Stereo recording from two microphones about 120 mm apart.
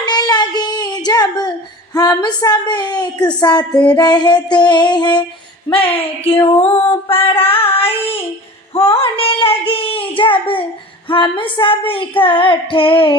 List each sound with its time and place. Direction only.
0.0 s child singing: 35° left (ahead or behind)
1.9 s a woman's voice: 35° left (ahead or behind)
5.7 s female singing: 50° left (ahead or behind)
9.0 s a child's voice: 50° left (ahead or behind)
11.1 s female singing: 40° left (ahead or behind)